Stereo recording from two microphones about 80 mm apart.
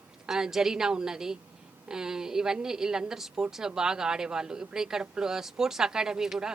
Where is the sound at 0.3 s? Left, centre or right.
Centre.